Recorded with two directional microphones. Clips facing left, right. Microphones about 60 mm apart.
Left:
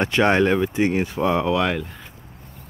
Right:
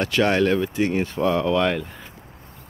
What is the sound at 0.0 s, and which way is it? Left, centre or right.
Speech, left.